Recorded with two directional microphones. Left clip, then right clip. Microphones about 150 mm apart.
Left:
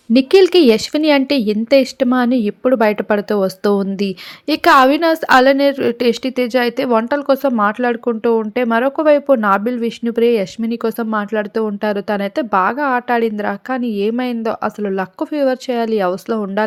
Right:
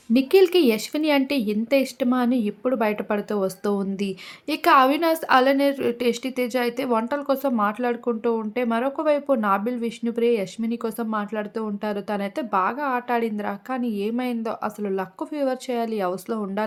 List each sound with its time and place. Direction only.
0.1 s speech: 40° left (ahead or behind)